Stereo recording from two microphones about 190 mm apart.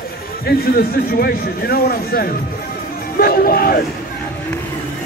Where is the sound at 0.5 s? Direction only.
50° left (ahead or behind).